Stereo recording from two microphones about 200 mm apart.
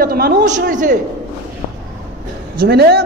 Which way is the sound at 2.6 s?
55° right (ahead or behind).